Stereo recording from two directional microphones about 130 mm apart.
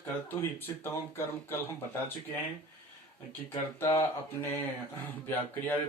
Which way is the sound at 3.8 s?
20° left (ahead or behind).